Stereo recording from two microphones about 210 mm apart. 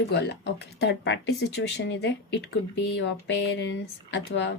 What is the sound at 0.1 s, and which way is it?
Speech, 55° left (ahead or behind).